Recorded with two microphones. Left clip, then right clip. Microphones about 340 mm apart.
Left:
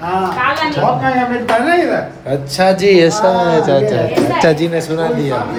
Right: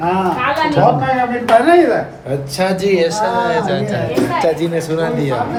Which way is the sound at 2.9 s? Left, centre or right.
Left.